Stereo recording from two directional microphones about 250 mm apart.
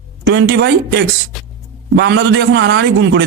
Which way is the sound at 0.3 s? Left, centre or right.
Right.